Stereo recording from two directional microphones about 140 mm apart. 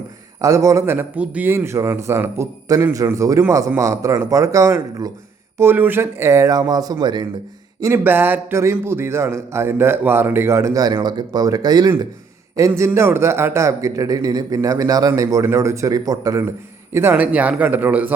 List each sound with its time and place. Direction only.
0.4 s a man's voice: 20° right (ahead or behind)